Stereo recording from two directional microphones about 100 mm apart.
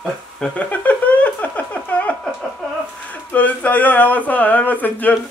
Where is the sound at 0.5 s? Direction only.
15° left (ahead or behind).